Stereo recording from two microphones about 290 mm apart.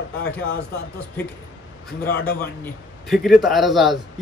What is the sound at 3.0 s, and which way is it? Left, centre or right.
Speech, centre.